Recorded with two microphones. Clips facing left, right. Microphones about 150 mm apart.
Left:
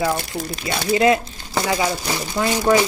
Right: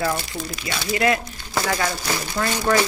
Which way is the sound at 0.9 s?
20° left (ahead or behind).